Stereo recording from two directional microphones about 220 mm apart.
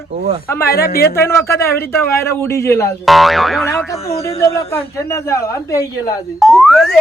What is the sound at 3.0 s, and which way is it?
Boing, centre (ahead or behind).